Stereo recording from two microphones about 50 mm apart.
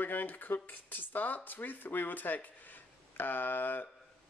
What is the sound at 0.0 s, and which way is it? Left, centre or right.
Speech, left.